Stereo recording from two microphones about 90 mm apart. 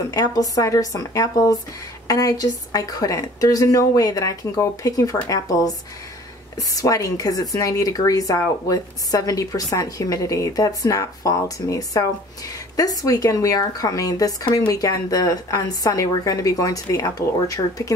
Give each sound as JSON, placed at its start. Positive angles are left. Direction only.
{"t": 0.1, "sound": "speech", "side_deg": 40}